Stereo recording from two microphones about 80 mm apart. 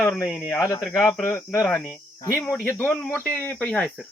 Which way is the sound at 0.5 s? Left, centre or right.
Left.